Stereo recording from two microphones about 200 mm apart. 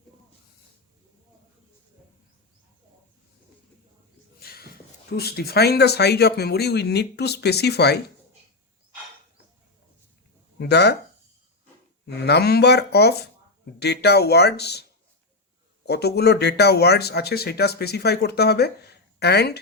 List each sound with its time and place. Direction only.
4.4 s a sound: 50° left (ahead or behind)
5.1 s speech: 55° left (ahead or behind)
10.6 s speech: 55° left (ahead or behind)
12.0 s speech: 55° left (ahead or behind)
15.9 s speech: 55° left (ahead or behind)